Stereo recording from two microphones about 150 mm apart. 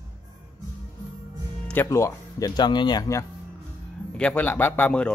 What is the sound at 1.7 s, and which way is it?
Speech, 15° left (ahead or behind).